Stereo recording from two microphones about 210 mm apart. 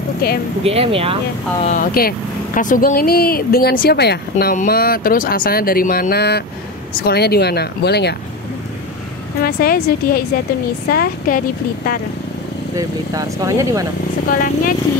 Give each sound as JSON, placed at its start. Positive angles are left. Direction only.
{"t": 0.2, "sound": "speech", "side_deg": 45}
{"t": 0.7, "sound": "speech", "side_deg": -25}
{"t": 1.6, "sound": "speech", "side_deg": 35}
{"t": 9.4, "sound": "speech", "side_deg": 45}
{"t": 12.7, "sound": "speech", "side_deg": -15}
{"t": 14.3, "sound": "speech", "side_deg": 40}